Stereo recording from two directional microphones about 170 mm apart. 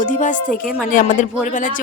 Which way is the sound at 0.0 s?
50° left (ahead or behind).